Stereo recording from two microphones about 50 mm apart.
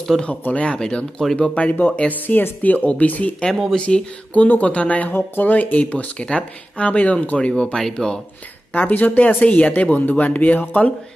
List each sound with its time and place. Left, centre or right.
0.4 s speech: left
0.7 s speech: centre
1.5 s speech: left
5.1 s speech: left; by 8.2 s centre
8.7 s speech: left